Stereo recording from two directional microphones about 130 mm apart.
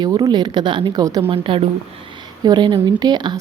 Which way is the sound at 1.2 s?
45° right (ahead or behind).